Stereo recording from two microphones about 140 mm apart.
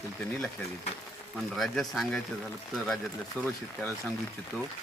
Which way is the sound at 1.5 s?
Centre (ahead or behind).